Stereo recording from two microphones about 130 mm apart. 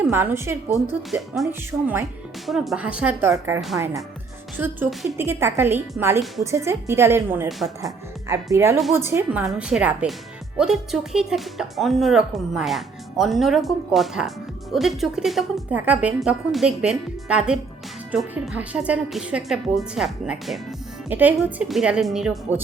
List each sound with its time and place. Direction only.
0.0 s speech: 15° right (ahead or behind)
2.5 s speech: 5° right (ahead or behind)
3.2 s a woman's voice: 20° right (ahead or behind)
4.5 s a woman's voice: 15° right (ahead or behind)
9.4 s speech: 5° right (ahead or behind)
21.1 s speech: 15° right (ahead or behind)
21.3 s speech: centre (ahead or behind)